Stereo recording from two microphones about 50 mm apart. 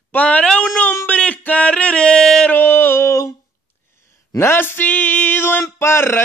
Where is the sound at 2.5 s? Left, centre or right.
Left.